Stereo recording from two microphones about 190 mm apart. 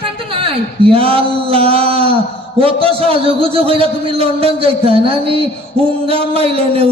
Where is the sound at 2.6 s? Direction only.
30° right (ahead or behind).